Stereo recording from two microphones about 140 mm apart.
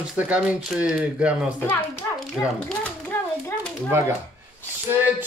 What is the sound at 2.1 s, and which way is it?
Speech, centre (ahead or behind).